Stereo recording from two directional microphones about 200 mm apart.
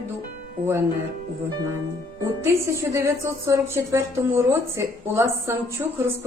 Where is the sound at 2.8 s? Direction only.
15° right (ahead or behind).